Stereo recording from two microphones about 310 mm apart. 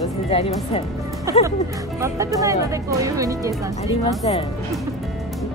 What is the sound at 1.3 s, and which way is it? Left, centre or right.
Speech, centre.